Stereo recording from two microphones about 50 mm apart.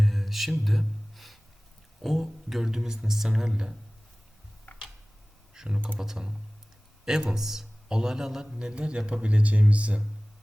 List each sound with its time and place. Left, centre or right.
0.0 s a sound: centre
2.0 s a man's voice: centre
5.5 s a man's voice: centre